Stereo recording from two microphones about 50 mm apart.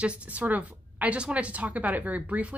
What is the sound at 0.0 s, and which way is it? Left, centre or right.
A woman's voice, right.